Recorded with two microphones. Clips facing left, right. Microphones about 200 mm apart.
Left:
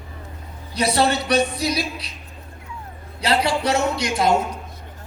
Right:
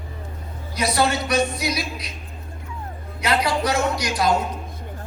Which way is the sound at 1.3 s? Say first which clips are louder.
Left 2 dB; 30° left (ahead or behind).